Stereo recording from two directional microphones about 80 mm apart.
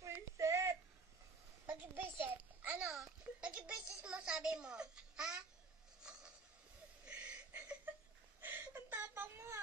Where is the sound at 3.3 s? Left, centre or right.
Centre.